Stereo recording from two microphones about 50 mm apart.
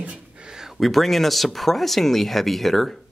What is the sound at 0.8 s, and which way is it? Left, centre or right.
Speech, centre.